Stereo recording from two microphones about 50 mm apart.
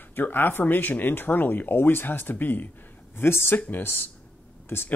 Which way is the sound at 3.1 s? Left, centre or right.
Left.